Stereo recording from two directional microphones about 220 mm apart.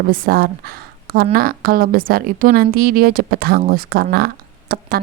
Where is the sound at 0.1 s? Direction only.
40° right (ahead or behind).